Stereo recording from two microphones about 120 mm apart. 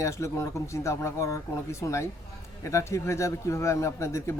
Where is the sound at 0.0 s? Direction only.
25° left (ahead or behind).